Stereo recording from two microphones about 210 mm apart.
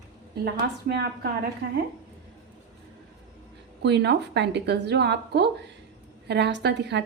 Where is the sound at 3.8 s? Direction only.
55° right (ahead or behind).